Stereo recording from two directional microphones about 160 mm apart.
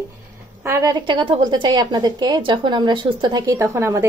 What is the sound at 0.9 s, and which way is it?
A woman's voice, 30° right (ahead or behind).